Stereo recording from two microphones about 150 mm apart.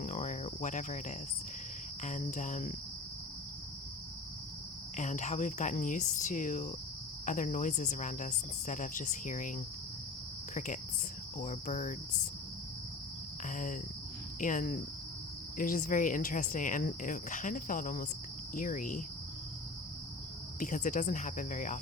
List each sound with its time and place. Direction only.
0.0 s cricket: 50° left (ahead or behind)
2.0 s speech: 55° left (ahead or behind)
4.9 s speech: 55° left (ahead or behind)
11.3 s speech: 60° left (ahead or behind)
13.5 s speech: 60° left (ahead or behind)
20.6 s speech: 60° left (ahead or behind)